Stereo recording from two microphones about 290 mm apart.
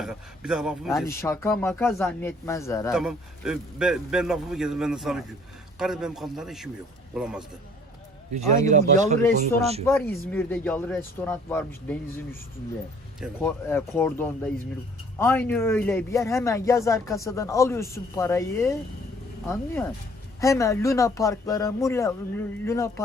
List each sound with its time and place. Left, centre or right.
0.0 s a man's voice: centre
0.9 s speech: centre
2.9 s a man's voice: centre
8.3 s speech: right
9.8 s a man's voice: centre
13.1 s speech: centre
20.4 s speech: centre